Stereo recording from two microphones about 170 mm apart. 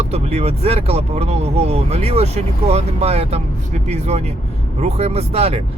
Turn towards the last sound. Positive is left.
turn(degrees=-35)  # may be behind; listen again after turning